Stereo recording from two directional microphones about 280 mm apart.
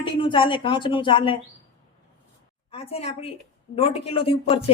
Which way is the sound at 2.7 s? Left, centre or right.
Left.